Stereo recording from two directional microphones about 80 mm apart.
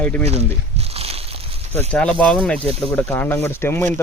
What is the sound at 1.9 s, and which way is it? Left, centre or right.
Speech, centre.